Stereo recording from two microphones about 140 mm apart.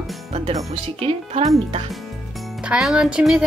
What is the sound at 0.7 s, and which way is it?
Speech, 40° right (ahead or behind).